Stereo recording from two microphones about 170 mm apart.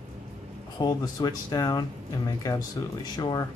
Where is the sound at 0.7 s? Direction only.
25° left (ahead or behind).